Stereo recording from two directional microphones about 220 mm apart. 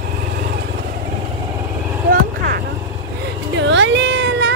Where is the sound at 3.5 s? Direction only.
55° right (ahead or behind).